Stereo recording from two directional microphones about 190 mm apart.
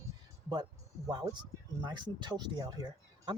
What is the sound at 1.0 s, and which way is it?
Speech, 20° right (ahead or behind).